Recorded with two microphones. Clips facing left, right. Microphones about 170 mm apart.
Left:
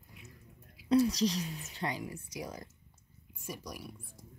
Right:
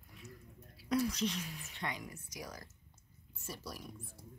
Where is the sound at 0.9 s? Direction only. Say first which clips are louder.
Left 7 dB; 35° left (ahead or behind).